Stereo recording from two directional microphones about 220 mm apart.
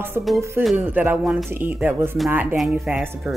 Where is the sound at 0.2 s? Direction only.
10° right (ahead or behind).